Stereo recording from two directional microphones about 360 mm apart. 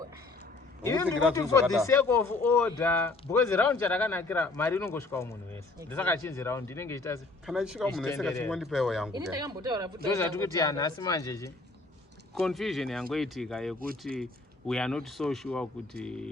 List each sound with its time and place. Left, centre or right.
0.9 s speech: centre
10.2 s speech: centre